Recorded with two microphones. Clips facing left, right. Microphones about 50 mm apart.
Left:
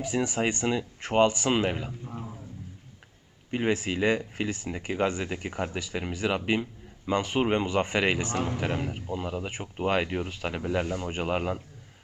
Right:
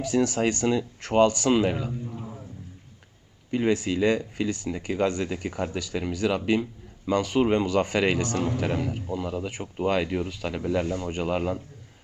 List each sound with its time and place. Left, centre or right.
0.0 s speech: centre
3.5 s speech: left